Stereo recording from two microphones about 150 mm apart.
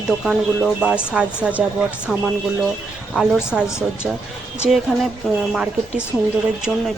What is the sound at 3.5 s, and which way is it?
Speech, 5° right (ahead or behind).